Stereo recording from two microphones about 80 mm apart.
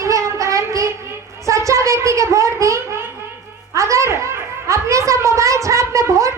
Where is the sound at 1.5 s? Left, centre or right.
Right.